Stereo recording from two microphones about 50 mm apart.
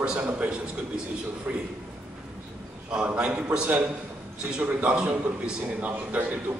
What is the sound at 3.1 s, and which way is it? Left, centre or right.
A man's voice, centre.